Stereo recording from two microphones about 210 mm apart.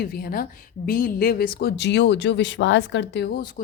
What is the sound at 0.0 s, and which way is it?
A woman's voice, 45° left (ahead or behind).